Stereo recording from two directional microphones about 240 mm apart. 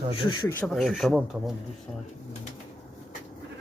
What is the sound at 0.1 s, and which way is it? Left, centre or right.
Speech, left.